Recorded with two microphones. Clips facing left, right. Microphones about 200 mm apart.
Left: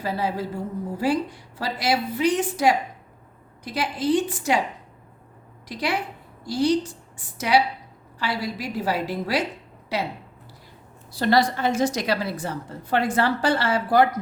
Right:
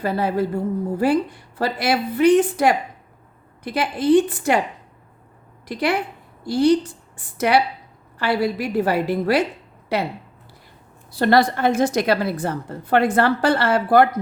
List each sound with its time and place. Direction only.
0.0 s a woman's voice: 55° right (ahead or behind)
5.6 s a woman's voice: 55° right (ahead or behind)
11.1 s a woman's voice: 55° right (ahead or behind)